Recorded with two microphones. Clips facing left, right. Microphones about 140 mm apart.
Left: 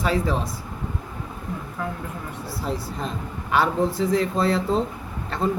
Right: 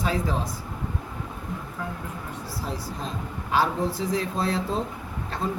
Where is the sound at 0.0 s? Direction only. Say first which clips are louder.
Left 4 dB; 70° left (ahead or behind).